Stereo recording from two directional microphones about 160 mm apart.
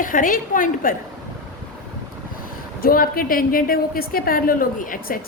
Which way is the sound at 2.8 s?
65° left (ahead or behind).